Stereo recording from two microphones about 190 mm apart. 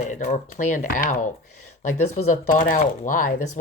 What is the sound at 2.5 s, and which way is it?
Speech, 45° left (ahead or behind).